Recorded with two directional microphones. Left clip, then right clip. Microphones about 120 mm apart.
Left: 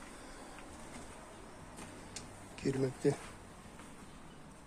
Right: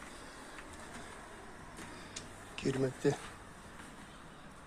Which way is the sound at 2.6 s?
15° left (ahead or behind).